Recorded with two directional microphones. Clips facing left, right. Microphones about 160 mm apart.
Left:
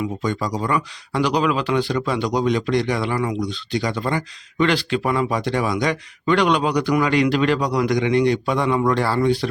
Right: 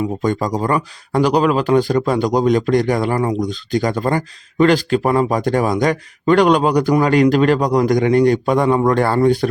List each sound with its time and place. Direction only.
0.2 s speech: 45° right (ahead or behind)